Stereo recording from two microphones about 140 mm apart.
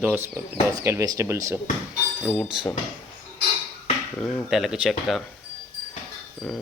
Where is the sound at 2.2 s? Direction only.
5° left (ahead or behind).